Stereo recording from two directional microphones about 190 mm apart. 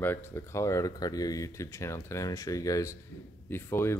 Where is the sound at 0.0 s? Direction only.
10° left (ahead or behind).